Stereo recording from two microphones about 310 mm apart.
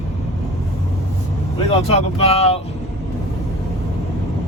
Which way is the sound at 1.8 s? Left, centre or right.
Centre.